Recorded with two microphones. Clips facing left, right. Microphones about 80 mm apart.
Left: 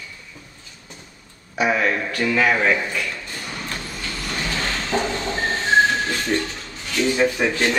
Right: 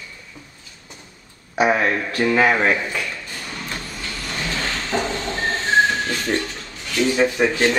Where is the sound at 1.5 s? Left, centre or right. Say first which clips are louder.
Right 2 dB; right.